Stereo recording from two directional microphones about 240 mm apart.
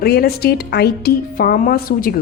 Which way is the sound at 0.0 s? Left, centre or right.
Left.